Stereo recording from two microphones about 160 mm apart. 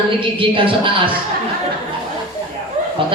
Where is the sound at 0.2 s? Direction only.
35° right (ahead or behind).